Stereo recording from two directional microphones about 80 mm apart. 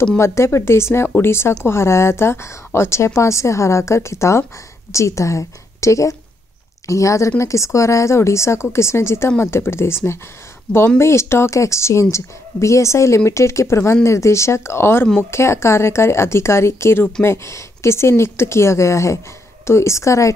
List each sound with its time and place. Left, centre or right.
0.2 s speech: left